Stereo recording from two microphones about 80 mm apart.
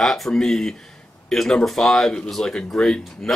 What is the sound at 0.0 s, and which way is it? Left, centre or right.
Speech, centre.